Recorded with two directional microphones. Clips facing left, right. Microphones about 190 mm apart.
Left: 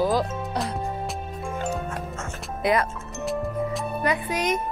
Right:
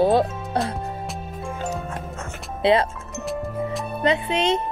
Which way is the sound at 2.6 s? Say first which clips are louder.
Right 4 dB; 30° right (ahead or behind).